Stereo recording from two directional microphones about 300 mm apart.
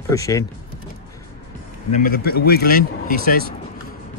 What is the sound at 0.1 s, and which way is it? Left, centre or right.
Speech, centre.